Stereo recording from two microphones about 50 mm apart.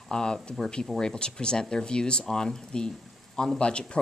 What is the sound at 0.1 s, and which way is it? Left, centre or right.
Speech, centre.